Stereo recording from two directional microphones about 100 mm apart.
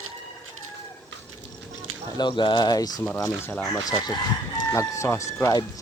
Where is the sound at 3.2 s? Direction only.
30° left (ahead or behind).